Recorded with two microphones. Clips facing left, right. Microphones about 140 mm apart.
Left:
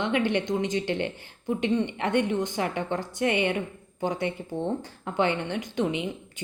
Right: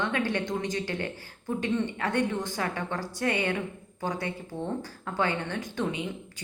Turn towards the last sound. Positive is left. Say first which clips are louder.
# left 4 dB
turn(degrees=20)  # may be behind; listen again after turning